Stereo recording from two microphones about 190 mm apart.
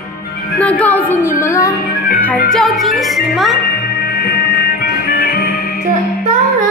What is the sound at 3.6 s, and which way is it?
Music, 50° left (ahead or behind).